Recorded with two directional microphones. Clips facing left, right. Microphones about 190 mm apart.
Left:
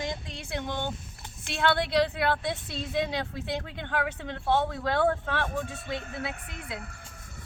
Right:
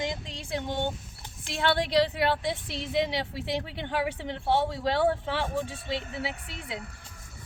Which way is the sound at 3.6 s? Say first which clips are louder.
Right 1 dB; 20° right (ahead or behind).